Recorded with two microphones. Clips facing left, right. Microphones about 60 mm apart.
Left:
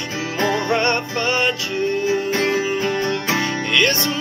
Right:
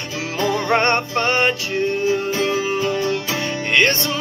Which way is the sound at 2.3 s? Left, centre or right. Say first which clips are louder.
Left 1 dB; left.